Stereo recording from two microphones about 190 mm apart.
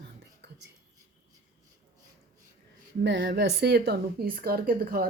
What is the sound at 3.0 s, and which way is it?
A woman's voice, 65° right (ahead or behind).